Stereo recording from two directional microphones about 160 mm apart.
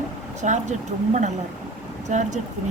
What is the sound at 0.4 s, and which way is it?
A woman's voice, 50° right (ahead or behind).